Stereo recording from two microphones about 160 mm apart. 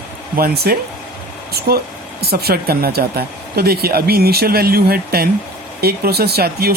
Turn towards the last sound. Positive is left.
turn(degrees=-75)  # may be behind; listen again after turning